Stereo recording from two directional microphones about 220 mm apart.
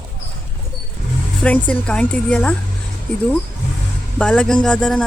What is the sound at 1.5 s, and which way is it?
Speech, 5° left (ahead or behind).